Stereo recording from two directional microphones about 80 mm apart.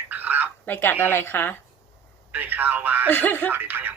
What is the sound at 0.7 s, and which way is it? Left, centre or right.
Speech, left.